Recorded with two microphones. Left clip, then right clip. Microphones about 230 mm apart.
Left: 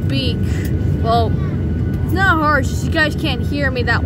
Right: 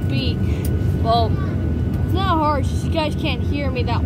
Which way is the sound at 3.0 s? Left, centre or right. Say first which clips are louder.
Left 5 dB; centre.